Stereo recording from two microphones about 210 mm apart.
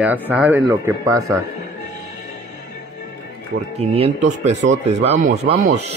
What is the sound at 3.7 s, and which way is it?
Speech, 30° right (ahead or behind).